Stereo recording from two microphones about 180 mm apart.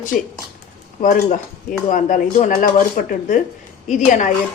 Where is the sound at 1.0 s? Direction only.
45° left (ahead or behind).